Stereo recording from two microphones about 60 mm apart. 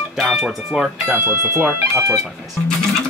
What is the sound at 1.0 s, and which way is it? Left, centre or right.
Speech, right.